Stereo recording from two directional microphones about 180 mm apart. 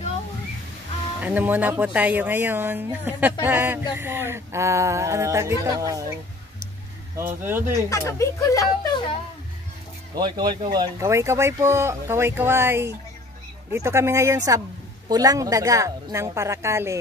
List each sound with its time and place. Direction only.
1.2 s speech: 10° right (ahead or behind)
7.2 s speech: 10° right (ahead or behind)
7.9 s speech: 15° left (ahead or behind)
10.1 s speech: 25° right (ahead or behind)